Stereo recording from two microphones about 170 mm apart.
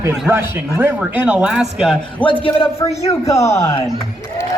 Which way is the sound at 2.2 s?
10° left (ahead or behind).